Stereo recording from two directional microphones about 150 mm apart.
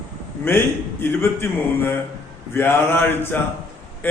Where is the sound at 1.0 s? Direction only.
15° left (ahead or behind).